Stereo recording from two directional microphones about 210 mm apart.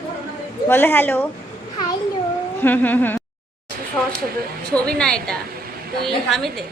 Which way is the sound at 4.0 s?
5° left (ahead or behind).